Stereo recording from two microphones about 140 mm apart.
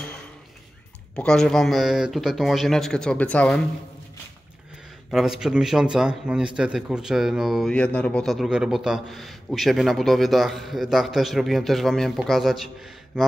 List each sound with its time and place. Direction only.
1.1 s a man's voice: 5° left (ahead or behind)
5.1 s a man's voice: 5° right (ahead or behind)